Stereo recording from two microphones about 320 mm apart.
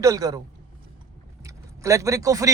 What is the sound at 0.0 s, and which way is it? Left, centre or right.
Speech, centre.